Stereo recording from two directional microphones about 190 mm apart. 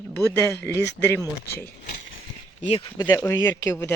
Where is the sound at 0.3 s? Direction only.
15° left (ahead or behind).